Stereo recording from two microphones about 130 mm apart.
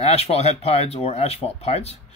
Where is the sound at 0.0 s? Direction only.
50° left (ahead or behind).